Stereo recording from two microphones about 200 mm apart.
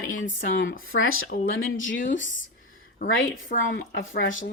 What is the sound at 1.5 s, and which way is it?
Speech, 75° left (ahead or behind).